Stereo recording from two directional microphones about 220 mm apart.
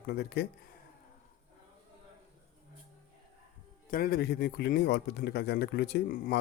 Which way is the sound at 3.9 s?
40° left (ahead or behind).